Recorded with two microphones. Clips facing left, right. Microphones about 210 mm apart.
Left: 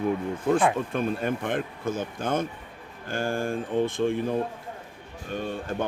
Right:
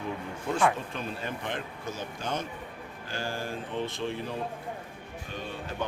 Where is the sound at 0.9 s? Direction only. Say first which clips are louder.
Left 9 dB; 55° left (ahead or behind).